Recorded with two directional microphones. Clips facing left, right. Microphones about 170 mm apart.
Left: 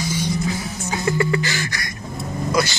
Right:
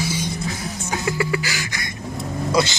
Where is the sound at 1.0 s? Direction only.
5° right (ahead or behind).